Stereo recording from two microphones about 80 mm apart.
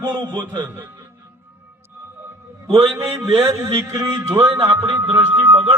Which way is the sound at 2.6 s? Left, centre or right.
Right.